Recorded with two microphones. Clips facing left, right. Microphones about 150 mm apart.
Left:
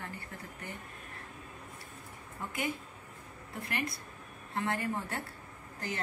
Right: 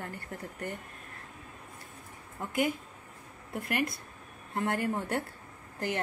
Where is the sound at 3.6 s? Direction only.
55° right (ahead or behind).